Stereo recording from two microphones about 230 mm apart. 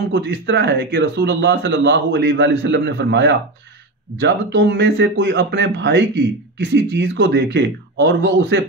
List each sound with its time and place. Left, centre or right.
0.1 s speech: right